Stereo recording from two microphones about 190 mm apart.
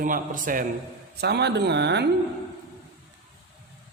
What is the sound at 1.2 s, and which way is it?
Speech, 60° right (ahead or behind).